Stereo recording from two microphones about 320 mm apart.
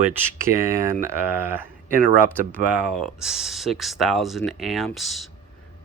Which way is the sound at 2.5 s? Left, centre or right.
Centre.